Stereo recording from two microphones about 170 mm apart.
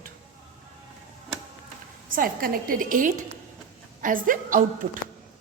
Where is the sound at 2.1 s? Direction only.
55° right (ahead or behind).